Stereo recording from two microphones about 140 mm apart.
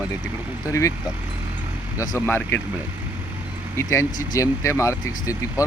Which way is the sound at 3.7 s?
20° left (ahead or behind).